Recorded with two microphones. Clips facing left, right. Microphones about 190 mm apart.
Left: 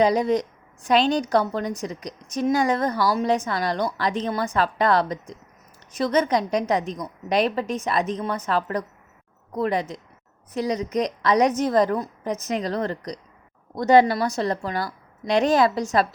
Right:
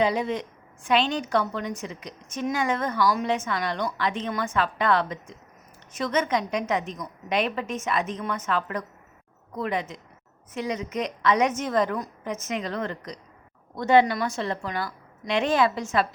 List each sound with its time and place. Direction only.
0.0 s a woman's voice: 40° left (ahead or behind)